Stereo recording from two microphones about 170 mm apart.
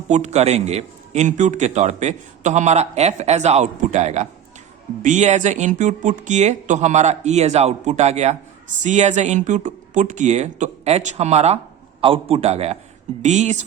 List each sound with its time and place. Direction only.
0.1 s a man's voice: 40° right (ahead or behind)